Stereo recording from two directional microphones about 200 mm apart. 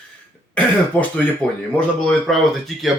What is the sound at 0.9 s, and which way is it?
Speech, 10° left (ahead or behind).